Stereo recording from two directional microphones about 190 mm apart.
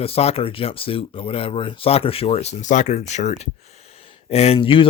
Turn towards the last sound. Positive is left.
turn(degrees=25)  # may be behind; listen again after turning